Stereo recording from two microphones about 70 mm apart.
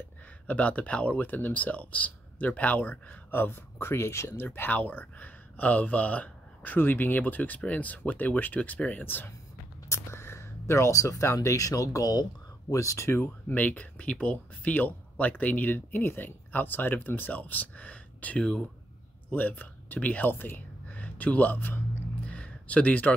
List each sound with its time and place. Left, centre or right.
0.5 s speech: left
9.8 s speech: left
22.3 s a sound: centre